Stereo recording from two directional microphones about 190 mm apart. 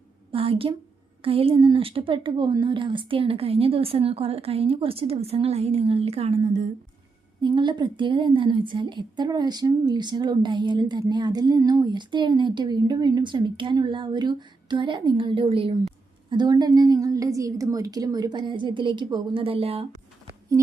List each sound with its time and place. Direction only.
0.3 s a woman's voice: 30° right (ahead or behind)
7.4 s a woman's voice: 25° right (ahead or behind)